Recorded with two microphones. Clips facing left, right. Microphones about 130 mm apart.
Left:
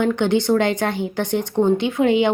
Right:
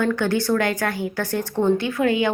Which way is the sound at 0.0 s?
20° left (ahead or behind).